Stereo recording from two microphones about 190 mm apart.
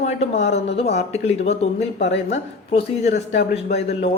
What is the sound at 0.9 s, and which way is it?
A man's voice, 35° left (ahead or behind).